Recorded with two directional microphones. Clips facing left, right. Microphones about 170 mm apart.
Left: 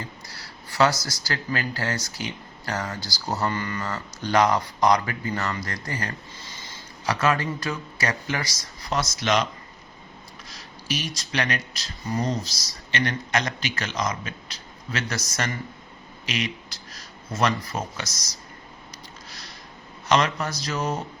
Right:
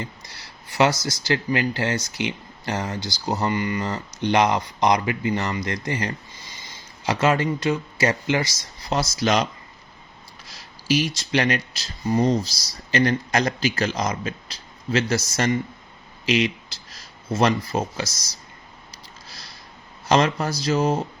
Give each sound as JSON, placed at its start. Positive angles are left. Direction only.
{"t": 0.0, "sound": "speech", "side_deg": -20}
{"t": 10.5, "sound": "speech", "side_deg": -30}
{"t": 20.1, "sound": "speech", "side_deg": -30}